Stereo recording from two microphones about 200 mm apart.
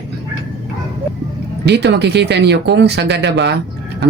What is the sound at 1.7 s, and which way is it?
Speech, 55° right (ahead or behind).